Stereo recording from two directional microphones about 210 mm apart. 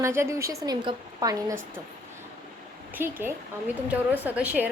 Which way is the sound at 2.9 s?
10° right (ahead or behind).